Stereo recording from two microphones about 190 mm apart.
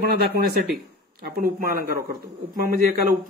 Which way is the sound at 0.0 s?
55° right (ahead or behind).